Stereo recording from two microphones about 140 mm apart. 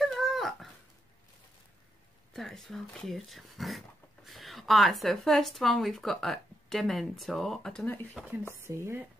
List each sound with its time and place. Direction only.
0.0 s dog: centre (ahead or behind)
2.3 s speech: centre (ahead or behind)
8.6 s speech: 20° right (ahead or behind)